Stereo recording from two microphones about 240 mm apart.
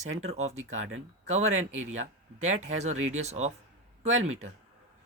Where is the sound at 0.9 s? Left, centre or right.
Right.